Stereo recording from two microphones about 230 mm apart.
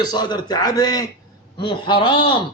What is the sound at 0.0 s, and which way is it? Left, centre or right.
A man's voice, centre.